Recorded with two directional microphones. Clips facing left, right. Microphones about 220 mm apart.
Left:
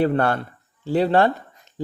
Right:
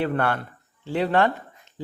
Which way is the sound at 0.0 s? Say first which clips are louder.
Left 4 dB; 40° left (ahead or behind).